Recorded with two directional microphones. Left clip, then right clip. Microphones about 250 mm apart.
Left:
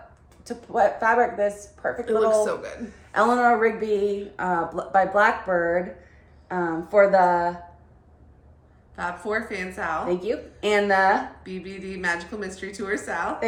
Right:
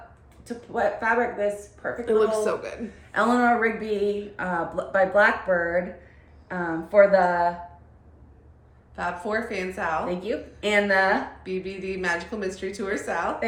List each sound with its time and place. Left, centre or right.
0.4 s a woman's voice: centre
2.0 s a woman's voice: centre
3.1 s a woman's voice: centre
9.0 s a woman's voice: centre
10.1 s a woman's voice: centre
11.4 s a woman's voice: centre